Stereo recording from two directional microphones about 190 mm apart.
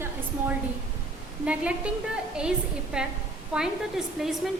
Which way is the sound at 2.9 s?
5° right (ahead or behind).